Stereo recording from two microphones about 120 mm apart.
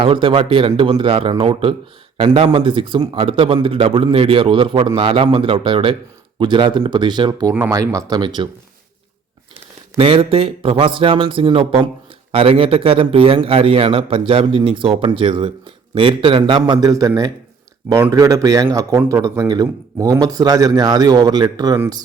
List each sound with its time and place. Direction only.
0.0 s a man's voice: 45° right (ahead or behind)
10.0 s a man's voice: 50° right (ahead or behind); by 17.1 s 30° right (ahead or behind)
18.1 s a man's voice: 30° right (ahead or behind)